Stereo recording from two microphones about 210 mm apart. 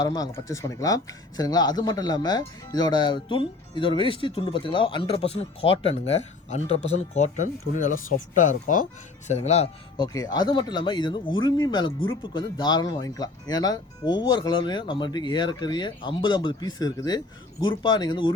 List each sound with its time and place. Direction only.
0.0 s speech: 20° left (ahead or behind)
10.1 s speech: 15° left (ahead or behind)